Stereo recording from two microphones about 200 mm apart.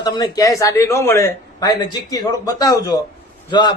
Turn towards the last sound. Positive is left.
turn(degrees=20)  # may be behind; listen again after turning